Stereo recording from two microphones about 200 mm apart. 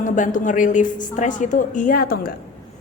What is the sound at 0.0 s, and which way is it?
A woman's voice, 40° left (ahead or behind).